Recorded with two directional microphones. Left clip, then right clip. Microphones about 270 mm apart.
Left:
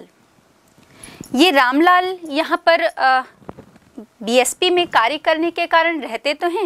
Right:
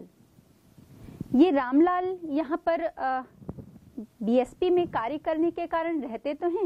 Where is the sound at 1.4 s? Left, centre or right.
Centre.